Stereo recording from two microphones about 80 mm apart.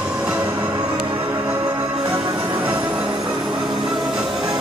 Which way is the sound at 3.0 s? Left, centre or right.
Right.